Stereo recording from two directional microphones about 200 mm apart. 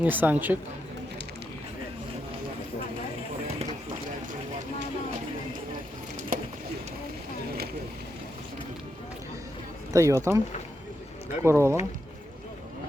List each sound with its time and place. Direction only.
0.0 s speech: 10° right (ahead or behind)
6.3 s a sound: 45° right (ahead or behind)
9.9 s speech: 15° right (ahead or behind)
11.4 s speech: 15° right (ahead or behind)